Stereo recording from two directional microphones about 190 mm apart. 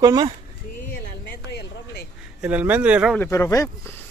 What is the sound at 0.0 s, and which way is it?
Speech, 20° right (ahead or behind).